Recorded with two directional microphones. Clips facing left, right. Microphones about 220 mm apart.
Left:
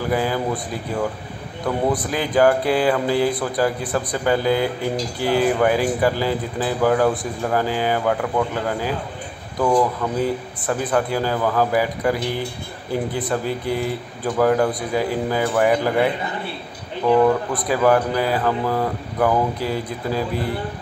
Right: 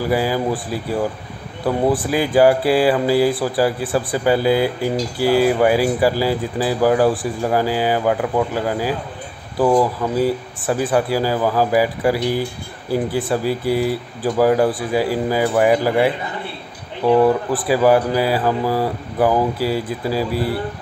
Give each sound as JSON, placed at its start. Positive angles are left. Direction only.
{"t": 0.1, "sound": "speech", "side_deg": -10}
{"t": 2.0, "sound": "a man's voice", "side_deg": -10}
{"t": 9.6, "sound": "speech", "side_deg": -25}
{"t": 10.6, "sound": "speech", "side_deg": -10}
{"t": 17.0, "sound": "speech", "side_deg": -30}
{"t": 17.6, "sound": "speech", "side_deg": -10}